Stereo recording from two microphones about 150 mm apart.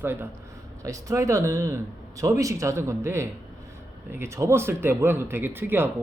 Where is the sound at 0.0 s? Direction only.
15° right (ahead or behind).